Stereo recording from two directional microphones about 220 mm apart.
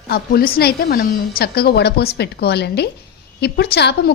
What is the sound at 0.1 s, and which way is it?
A woman's voice, 45° left (ahead or behind).